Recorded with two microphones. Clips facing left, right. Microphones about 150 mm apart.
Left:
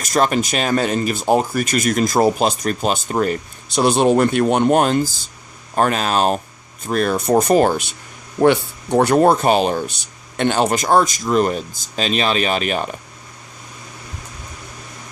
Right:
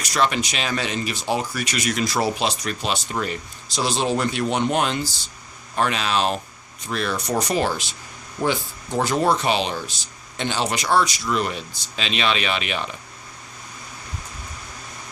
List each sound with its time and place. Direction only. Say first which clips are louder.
0.0 s speech: left 5 dB; 45° left (ahead or behind)